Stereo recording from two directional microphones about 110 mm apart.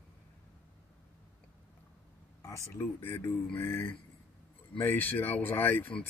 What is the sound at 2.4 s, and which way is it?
Speech, 30° left (ahead or behind).